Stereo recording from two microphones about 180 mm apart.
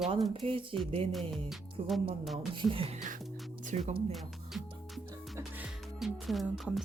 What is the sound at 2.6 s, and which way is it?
Speech, 30° right (ahead or behind).